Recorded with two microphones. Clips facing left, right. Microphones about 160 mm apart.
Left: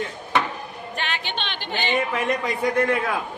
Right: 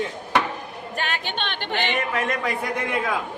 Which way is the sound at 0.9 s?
45° right (ahead or behind).